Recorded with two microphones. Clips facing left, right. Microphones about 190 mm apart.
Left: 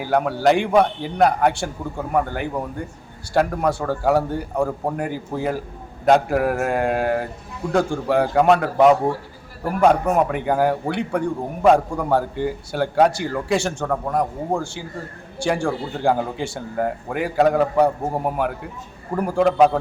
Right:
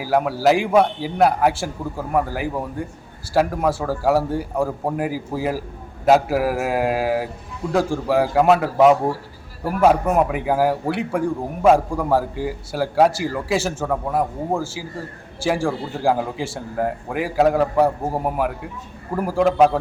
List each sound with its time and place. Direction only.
0.0 s a man's voice: 5° right (ahead or behind)